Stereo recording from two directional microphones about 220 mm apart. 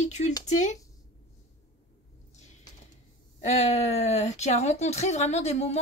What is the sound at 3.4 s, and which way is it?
Speech, 30° left (ahead or behind).